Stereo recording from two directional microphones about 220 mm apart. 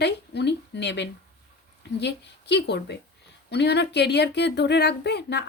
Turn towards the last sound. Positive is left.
turn(degrees=50)  # may be behind; listen again after turning